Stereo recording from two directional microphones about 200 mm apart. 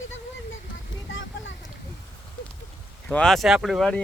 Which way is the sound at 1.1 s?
75° left (ahead or behind).